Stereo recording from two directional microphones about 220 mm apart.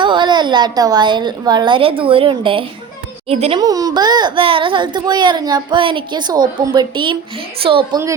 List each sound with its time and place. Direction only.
0.0 s a child's voice: 20° right (ahead or behind)